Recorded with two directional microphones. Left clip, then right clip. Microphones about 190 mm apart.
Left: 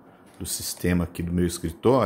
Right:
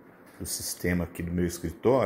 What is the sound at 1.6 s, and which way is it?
Speech, 30° left (ahead or behind).